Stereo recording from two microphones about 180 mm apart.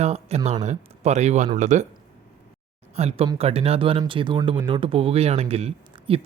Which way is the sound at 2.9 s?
35° right (ahead or behind).